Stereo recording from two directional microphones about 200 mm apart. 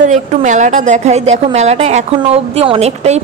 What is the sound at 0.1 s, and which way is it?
A woman's voice, 35° right (ahead or behind).